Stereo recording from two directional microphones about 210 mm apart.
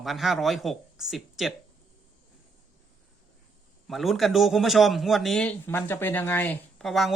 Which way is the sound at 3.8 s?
Centre (ahead or behind).